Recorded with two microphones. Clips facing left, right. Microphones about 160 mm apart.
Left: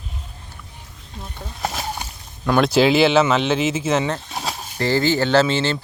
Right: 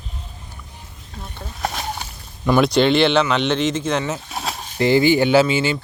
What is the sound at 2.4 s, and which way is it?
Speech, centre (ahead or behind).